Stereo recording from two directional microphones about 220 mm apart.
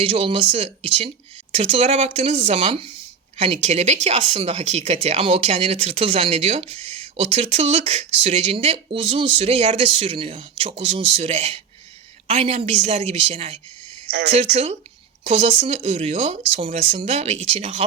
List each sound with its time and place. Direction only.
0.0 s speech: 25° right (ahead or behind)
14.1 s speech: 50° right (ahead or behind)
14.5 s speech: 30° right (ahead or behind)